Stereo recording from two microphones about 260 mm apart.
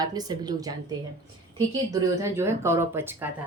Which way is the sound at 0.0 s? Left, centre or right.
Centre.